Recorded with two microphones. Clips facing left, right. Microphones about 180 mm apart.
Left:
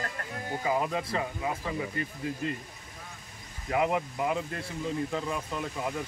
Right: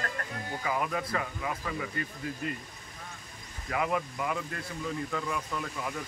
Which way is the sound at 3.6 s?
25° left (ahead or behind).